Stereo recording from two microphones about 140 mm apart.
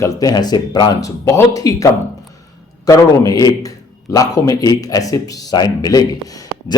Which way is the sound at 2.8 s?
25° left (ahead or behind).